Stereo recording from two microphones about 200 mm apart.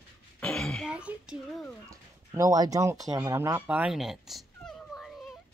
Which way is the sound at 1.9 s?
15° right (ahead or behind).